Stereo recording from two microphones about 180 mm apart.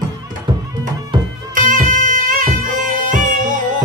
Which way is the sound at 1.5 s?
45° right (ahead or behind).